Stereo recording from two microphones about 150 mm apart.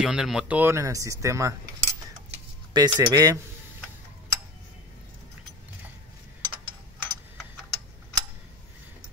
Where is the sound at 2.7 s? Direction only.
25° right (ahead or behind).